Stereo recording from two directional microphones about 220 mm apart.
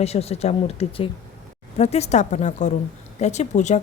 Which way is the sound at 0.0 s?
30° left (ahead or behind).